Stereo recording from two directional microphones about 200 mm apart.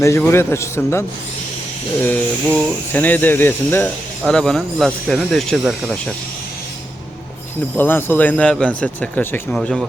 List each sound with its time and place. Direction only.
0.0 s a man's voice: 15° left (ahead or behind)
2.0 s a man's voice: 10° left (ahead or behind)
7.8 s a man's voice: 10° left (ahead or behind)